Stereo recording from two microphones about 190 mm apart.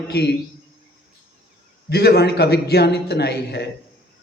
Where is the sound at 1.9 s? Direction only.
55° left (ahead or behind).